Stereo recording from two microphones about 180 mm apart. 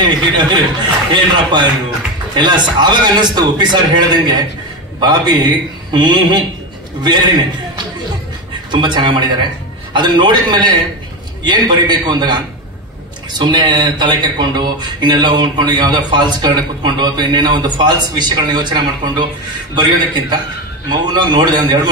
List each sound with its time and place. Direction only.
0.0 s speech: 25° right (ahead or behind)
8.8 s speech: 25° right (ahead or behind)
13.4 s speech: 25° right (ahead or behind)